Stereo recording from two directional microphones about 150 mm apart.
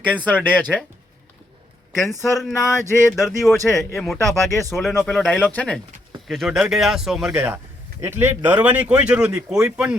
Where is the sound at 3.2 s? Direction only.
Centre (ahead or behind).